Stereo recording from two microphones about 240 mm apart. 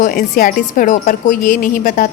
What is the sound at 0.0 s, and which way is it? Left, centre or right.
A woman's voice, left.